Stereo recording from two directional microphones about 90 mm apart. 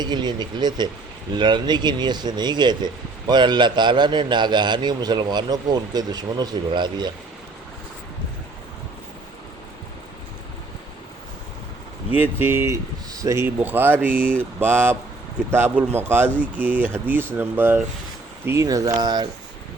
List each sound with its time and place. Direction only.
0.0 s speech: 55° right (ahead or behind)
12.1 s speech: 20° right (ahead or behind)
18.4 s speech: 35° right (ahead or behind)